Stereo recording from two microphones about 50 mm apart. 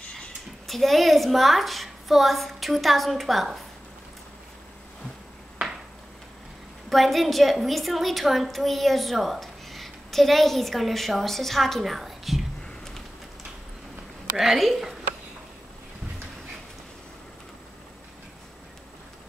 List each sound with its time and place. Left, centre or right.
0.7 s a woman's voice: centre
6.9 s a woman's voice: centre
12.6 s a sound: centre
14.3 s a woman's voice: centre